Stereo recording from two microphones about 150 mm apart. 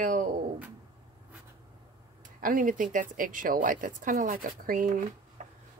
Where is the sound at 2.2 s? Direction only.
65° right (ahead or behind).